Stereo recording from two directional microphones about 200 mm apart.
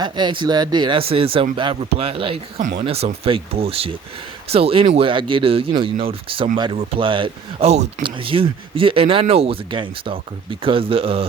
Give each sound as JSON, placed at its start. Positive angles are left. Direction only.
{"t": 0.0, "sound": "speech", "side_deg": -20}